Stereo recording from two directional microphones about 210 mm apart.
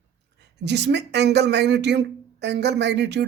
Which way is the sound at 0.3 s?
55° right (ahead or behind).